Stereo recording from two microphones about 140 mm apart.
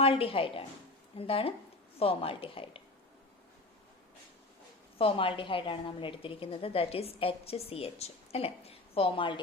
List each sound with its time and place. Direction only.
0.0 s a woman's voice: 40° left (ahead or behind)
4.9 s a woman's voice: 40° left (ahead or behind)